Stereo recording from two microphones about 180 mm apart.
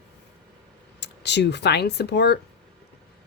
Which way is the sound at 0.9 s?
70° left (ahead or behind).